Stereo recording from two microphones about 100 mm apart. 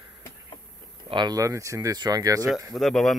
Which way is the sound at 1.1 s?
45° right (ahead or behind).